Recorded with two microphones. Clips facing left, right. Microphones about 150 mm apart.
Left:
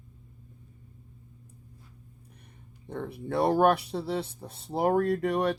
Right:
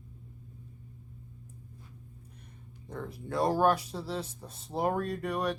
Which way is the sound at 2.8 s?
65° left (ahead or behind).